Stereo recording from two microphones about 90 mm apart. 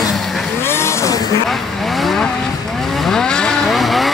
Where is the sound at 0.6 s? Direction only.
30° left (ahead or behind).